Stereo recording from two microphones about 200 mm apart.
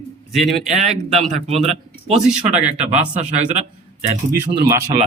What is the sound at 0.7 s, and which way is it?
A man's voice, 35° right (ahead or behind).